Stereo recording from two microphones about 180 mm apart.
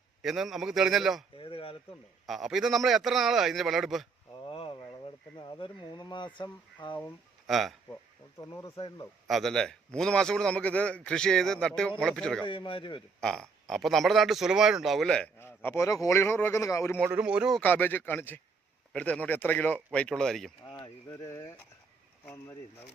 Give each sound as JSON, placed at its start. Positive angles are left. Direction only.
{"t": 0.2, "sound": "speech", "side_deg": 0}
{"t": 1.4, "sound": "speech", "side_deg": 30}
{"t": 2.2, "sound": "speech", "side_deg": 0}
{"t": 4.3, "sound": "a sound", "side_deg": 25}
{"t": 5.0, "sound": "speech", "side_deg": 25}
{"t": 7.4, "sound": "speech", "side_deg": 0}
{"t": 8.4, "sound": "speech", "side_deg": 20}
{"t": 9.2, "sound": "speech", "side_deg": 0}
{"t": 12.5, "sound": "speech", "side_deg": 30}
{"t": 13.1, "sound": "speech", "side_deg": 5}
{"t": 17.0, "sound": "speech", "side_deg": -10}
{"t": 17.6, "sound": "speech", "side_deg": 10}
{"t": 20.7, "sound": "speech", "side_deg": 20}